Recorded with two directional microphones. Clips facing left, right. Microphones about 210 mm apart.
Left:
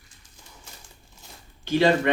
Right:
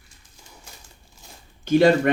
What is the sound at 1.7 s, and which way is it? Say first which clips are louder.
Speech: right 4 dB; 45° right (ahead or behind).